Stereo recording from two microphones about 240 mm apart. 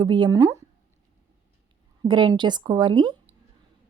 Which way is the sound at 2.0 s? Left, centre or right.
Centre.